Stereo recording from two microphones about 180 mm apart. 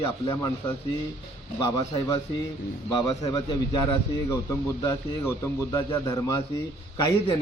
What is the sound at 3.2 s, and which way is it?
A man's voice, 20° left (ahead or behind).